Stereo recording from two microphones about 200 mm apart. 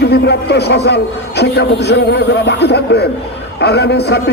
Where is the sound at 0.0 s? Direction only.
55° left (ahead or behind).